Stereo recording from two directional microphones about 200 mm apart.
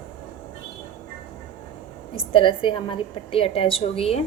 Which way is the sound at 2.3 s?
25° left (ahead or behind).